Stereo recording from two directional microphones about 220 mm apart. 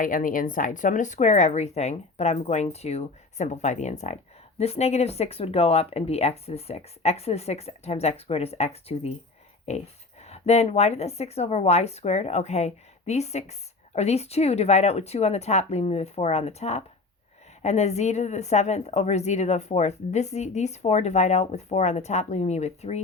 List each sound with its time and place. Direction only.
0.0 s a woman's voice: 40° left (ahead or behind)